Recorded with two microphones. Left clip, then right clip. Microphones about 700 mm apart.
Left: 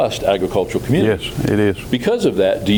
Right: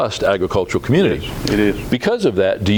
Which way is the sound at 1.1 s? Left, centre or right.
Left.